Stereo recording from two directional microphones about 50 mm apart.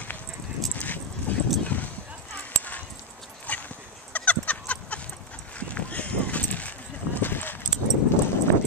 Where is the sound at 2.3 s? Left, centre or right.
Left.